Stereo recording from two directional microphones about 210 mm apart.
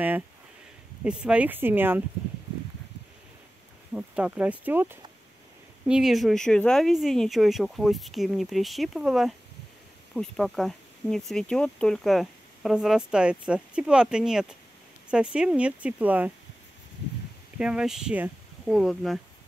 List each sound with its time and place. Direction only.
1.0 s speech: 5° right (ahead or behind)
3.9 s speech: 5° right (ahead or behind)
17.6 s speech: 5° right (ahead or behind)